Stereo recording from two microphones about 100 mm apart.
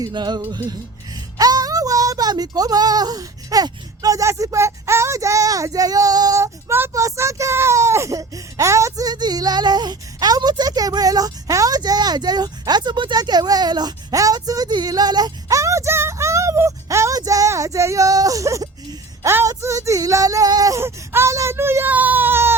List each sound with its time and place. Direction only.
0.0 s music: 45° right (ahead or behind)
0.7 s speech: 40° right (ahead or behind); by 22.5 s 20° right (ahead or behind)